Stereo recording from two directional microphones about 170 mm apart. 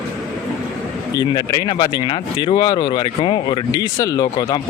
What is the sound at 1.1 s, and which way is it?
Speech, 25° left (ahead or behind).